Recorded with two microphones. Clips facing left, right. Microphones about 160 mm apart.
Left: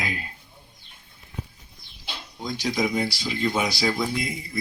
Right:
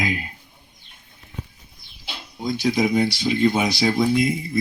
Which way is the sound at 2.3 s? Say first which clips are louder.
Right 6 dB; 10° right (ahead or behind).